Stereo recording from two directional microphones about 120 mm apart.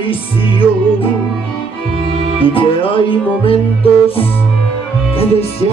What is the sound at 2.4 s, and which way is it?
Music, 50° left (ahead or behind).